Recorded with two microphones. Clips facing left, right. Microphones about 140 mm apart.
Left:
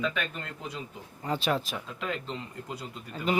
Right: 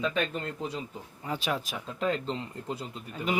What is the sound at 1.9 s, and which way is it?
Speech, 35° right (ahead or behind).